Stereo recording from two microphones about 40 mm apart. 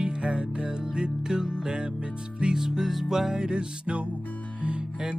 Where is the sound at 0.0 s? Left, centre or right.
Right.